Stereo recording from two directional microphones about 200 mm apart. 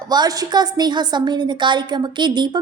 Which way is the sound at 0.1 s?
20° right (ahead or behind).